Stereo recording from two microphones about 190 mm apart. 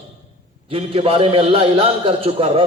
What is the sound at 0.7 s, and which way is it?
A man's voice, 30° right (ahead or behind).